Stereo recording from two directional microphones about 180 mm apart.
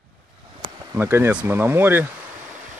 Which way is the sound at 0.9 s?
10° right (ahead or behind).